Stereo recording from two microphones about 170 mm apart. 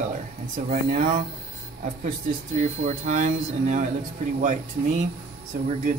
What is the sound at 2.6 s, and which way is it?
A man's voice, 45° right (ahead or behind).